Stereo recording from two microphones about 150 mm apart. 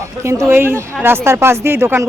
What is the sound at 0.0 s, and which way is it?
Speech, 20° right (ahead or behind).